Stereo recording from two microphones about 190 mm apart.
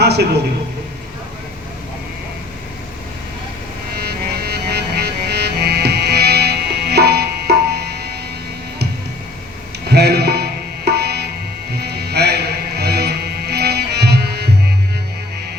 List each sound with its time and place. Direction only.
0.0 s a man's voice: 60° right (ahead or behind)
3.9 s music: 55° right (ahead or behind)
9.9 s tabla: 60° right (ahead or behind)
11.7 s music: 55° right (ahead or behind)